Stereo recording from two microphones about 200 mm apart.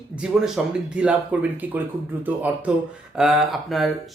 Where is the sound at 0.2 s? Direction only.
5° right (ahead or behind).